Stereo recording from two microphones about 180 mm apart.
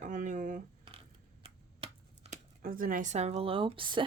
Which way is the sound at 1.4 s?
30° right (ahead or behind).